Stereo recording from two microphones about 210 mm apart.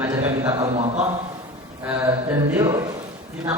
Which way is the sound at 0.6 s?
30° right (ahead or behind).